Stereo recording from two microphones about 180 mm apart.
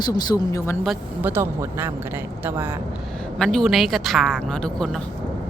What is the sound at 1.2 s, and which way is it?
Speech, 15° right (ahead or behind).